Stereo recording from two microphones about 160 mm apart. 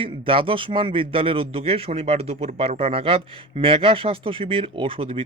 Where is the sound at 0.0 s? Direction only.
35° right (ahead or behind).